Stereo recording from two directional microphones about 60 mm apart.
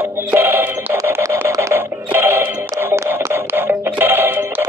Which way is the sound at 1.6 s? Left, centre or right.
Right.